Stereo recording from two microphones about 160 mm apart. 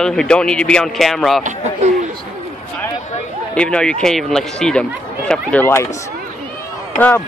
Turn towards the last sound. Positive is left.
turn(degrees=10)  # may be behind; listen again after turning